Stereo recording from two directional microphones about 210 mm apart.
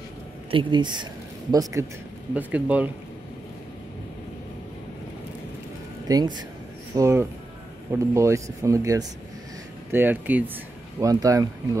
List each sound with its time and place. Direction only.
0.5 s speech: 25° right (ahead or behind); by 2.9 s 5° right (ahead or behind)
6.0 s speech: 20° right (ahead or behind)